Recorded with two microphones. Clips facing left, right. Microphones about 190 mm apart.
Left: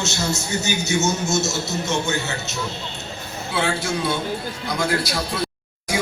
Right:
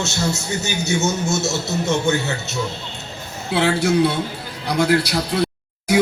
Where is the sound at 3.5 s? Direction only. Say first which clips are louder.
Right 7 dB; 60° right (ahead or behind).